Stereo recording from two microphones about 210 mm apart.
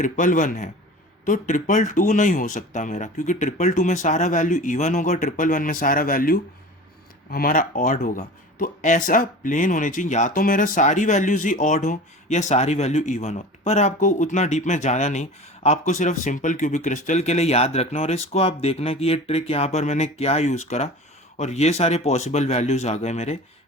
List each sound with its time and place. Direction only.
0.0 s speech: 40° left (ahead or behind)